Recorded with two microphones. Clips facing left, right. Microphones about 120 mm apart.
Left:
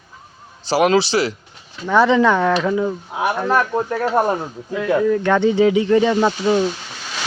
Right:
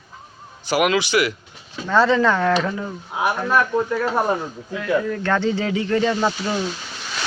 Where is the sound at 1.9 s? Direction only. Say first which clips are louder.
Left 3 dB; 15° left (ahead or behind).